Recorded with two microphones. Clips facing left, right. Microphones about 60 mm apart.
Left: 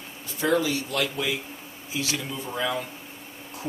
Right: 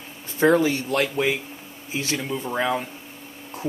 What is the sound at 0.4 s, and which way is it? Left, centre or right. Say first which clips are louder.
Speech: right 5 dB; right.